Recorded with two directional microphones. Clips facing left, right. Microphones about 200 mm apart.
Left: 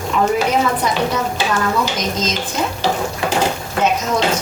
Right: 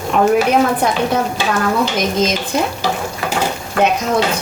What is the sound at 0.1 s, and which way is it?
Speech, 60° right (ahead or behind).